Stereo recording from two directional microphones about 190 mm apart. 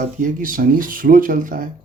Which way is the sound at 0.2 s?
45° right (ahead or behind).